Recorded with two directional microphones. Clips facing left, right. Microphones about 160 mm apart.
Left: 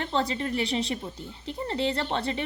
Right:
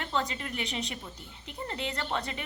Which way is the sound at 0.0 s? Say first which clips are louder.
Left 5 dB; 30° left (ahead or behind).